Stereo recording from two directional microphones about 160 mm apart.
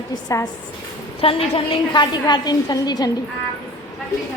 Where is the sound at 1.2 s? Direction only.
35° left (ahead or behind).